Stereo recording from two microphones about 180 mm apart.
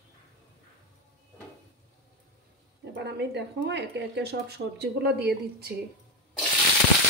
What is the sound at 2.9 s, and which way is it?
Speech, 70° right (ahead or behind).